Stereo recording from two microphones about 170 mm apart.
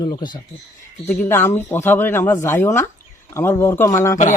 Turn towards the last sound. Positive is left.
turn(degrees=20)  # may be behind; listen again after turning